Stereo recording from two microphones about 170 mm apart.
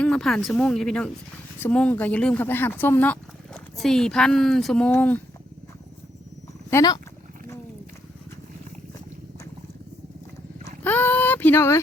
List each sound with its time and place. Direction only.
0.0 s speech: 5° left (ahead or behind)
6.7 s speech: 20° left (ahead or behind)
10.8 s a sound: 10° left (ahead or behind)